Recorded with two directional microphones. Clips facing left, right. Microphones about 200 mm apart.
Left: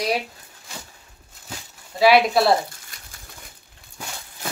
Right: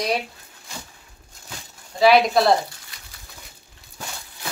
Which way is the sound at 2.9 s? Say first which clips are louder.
Left 1 dB; 45° left (ahead or behind).